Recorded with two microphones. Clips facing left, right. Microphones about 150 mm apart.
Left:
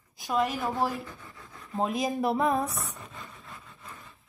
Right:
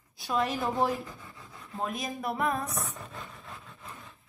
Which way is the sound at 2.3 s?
25° left (ahead or behind).